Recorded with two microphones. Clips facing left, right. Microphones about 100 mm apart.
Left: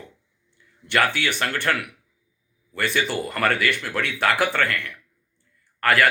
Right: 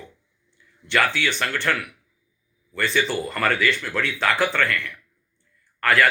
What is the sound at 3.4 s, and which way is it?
Speech, 55° left (ahead or behind).